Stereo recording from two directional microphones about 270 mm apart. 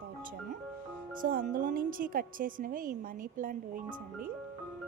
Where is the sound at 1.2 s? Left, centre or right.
Right.